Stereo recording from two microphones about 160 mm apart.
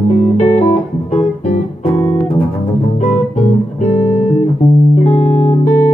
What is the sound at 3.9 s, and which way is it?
Music, 40° left (ahead or behind).